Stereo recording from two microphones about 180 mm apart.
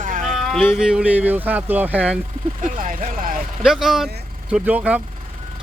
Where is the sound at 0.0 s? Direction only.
45° right (ahead or behind).